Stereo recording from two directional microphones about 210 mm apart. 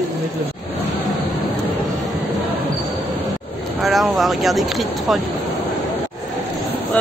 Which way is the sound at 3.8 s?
Centre (ahead or behind).